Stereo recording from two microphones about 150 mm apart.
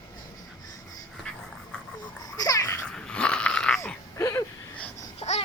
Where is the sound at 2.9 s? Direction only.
5° left (ahead or behind).